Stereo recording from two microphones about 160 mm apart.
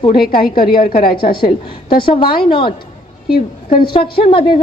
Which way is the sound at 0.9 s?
65° left (ahead or behind).